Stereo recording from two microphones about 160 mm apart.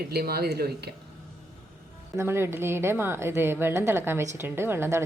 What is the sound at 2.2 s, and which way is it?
A woman's voice, 15° right (ahead or behind).